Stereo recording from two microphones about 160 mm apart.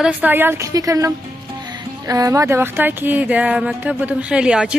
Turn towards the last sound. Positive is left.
turn(degrees=-5)  # may be behind; listen again after turning